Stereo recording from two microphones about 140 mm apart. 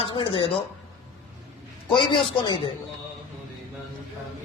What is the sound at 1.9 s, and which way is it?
Speech, 35° left (ahead or behind).